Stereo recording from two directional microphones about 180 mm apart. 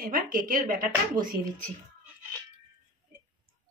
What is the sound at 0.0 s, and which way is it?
Speech, 50° right (ahead or behind).